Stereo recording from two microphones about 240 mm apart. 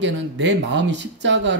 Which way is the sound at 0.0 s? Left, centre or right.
Right.